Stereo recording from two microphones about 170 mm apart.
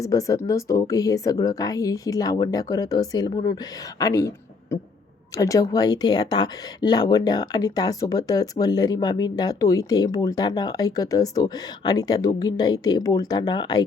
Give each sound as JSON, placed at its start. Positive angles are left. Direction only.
{"t": 0.0, "sound": "speech", "side_deg": 20}
{"t": 5.4, "sound": "speech", "side_deg": 20}